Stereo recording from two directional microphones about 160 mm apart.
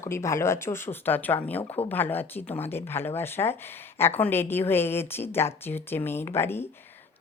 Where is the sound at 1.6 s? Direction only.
35° left (ahead or behind).